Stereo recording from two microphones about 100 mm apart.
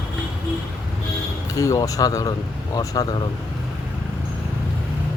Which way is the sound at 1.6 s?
35° left (ahead or behind).